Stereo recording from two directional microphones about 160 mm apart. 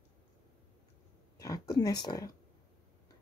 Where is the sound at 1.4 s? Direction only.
20° left (ahead or behind).